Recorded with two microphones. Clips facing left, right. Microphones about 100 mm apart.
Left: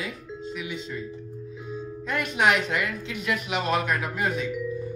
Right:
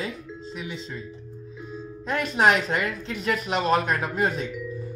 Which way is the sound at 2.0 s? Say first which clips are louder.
Right 3 dB; 35° right (ahead or behind).